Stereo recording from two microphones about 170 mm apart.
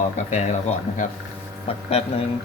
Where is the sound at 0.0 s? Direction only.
45° left (ahead or behind).